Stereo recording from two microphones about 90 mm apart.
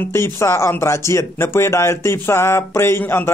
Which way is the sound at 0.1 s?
30° left (ahead or behind).